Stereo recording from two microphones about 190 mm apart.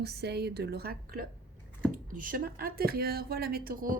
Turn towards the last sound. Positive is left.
turn(degrees=-50)  # may be behind; listen again after turning